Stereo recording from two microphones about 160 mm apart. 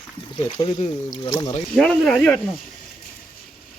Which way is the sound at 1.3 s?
25° left (ahead or behind).